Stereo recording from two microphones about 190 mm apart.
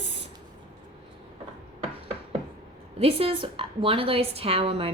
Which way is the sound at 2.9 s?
30° right (ahead or behind).